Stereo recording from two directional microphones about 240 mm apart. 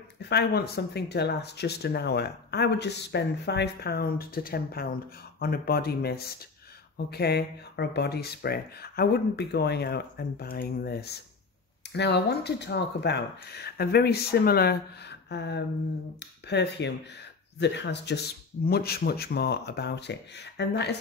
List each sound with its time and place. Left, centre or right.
0.3 s speech: left